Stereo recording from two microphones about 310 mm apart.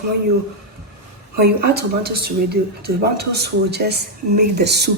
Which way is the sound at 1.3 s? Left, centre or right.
Right.